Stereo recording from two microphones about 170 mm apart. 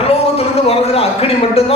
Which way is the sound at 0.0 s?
35° left (ahead or behind).